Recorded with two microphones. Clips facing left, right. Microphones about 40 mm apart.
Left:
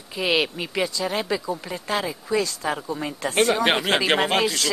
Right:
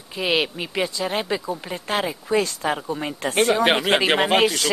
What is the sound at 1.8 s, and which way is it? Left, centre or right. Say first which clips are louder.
Speech: right 3 dB; right.